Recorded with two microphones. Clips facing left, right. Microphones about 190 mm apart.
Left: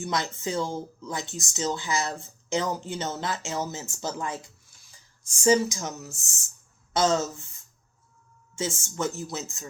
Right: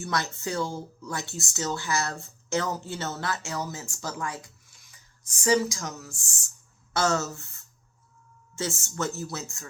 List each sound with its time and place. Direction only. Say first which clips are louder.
0.0 s speech: left 1 dB; 15° left (ahead or behind)
8.5 s speech: left 1 dB; 15° left (ahead or behind)